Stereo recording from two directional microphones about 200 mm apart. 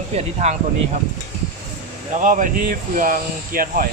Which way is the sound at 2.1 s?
40° right (ahead or behind).